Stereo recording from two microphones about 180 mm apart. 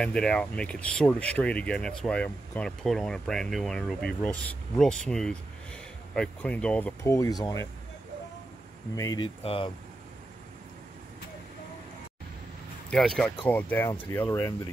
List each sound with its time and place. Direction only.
0.0 s speech: 5° left (ahead or behind); by 7.6 s 20° left (ahead or behind)
8.9 s speech: 20° left (ahead or behind)
9.4 s speech: 30° left (ahead or behind)
12.9 s speech: 5° left (ahead or behind)